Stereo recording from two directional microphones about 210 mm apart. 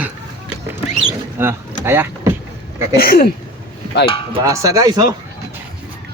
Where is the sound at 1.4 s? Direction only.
10° right (ahead or behind).